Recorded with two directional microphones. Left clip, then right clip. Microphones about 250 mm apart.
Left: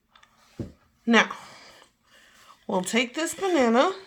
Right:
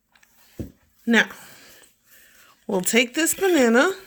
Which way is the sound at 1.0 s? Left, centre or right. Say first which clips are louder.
Right 1 dB; right.